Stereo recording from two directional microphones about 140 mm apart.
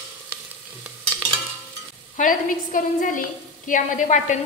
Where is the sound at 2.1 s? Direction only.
70° left (ahead or behind).